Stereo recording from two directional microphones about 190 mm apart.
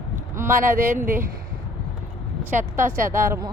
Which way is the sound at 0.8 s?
45° right (ahead or behind).